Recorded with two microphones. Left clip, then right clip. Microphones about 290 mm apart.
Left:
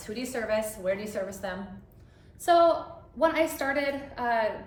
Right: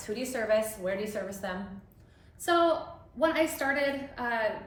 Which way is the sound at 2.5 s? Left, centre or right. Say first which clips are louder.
Left 4 dB; centre.